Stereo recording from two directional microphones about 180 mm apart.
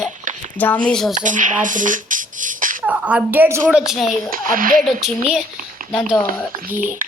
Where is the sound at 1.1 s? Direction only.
45° right (ahead or behind).